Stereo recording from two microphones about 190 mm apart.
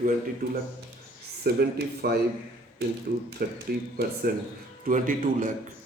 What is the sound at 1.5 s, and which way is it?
Speech, 55° right (ahead or behind).